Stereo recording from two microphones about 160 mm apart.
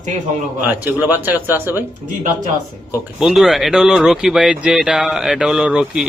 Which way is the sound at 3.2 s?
Centre (ahead or behind).